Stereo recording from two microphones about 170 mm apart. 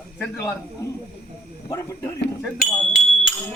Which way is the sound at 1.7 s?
20° left (ahead or behind).